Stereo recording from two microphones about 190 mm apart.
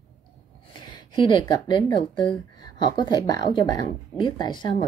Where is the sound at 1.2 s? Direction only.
25° left (ahead or behind).